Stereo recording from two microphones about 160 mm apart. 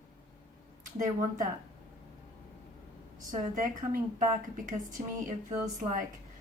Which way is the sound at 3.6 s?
60° right (ahead or behind).